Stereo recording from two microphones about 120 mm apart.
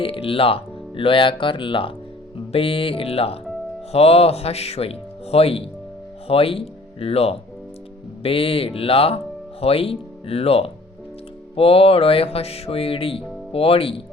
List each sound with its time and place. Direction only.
0.0 s speech: 50° left (ahead or behind)
2.5 s music: 50° left (ahead or behind)
3.9 s speech: 55° left (ahead or behind)
11.5 s music: 55° left (ahead or behind)